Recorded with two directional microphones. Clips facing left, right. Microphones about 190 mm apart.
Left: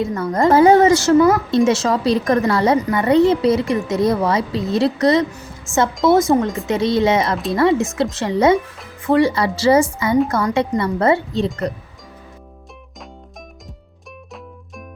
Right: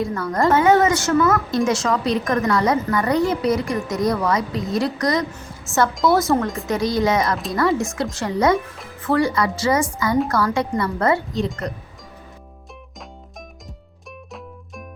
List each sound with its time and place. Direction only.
0.0 s a woman's voice: 20° left (ahead or behind)
0.5 s a woman's voice: 35° left (ahead or behind)
5.7 s a woman's voice: centre (ahead or behind)
6.0 s a woman's voice: 25° left (ahead or behind)